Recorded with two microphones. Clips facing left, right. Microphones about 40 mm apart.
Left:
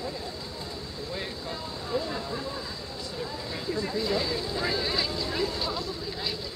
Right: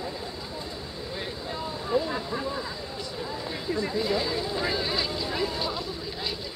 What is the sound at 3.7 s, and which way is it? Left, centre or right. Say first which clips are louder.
Speech: right 2 dB; centre.